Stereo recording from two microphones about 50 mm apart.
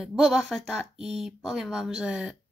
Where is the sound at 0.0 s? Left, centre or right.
Centre.